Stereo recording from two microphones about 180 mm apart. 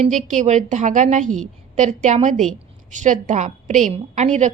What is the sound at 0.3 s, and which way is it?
A woman's voice, 40° right (ahead or behind).